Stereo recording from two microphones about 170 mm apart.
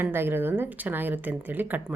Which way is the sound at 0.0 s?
15° right (ahead or behind).